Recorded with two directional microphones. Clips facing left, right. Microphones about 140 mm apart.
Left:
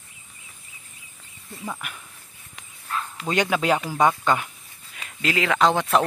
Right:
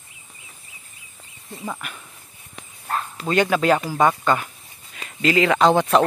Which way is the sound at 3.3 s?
10° left (ahead or behind).